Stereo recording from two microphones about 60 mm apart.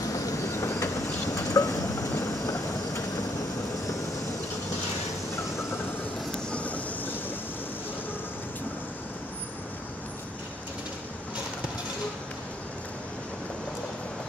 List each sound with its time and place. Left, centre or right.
0.1 s train: left
1.4 s vehicle: left
6.5 s train: left